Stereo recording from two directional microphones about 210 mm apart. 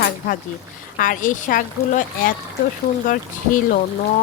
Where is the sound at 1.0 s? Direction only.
40° left (ahead or behind).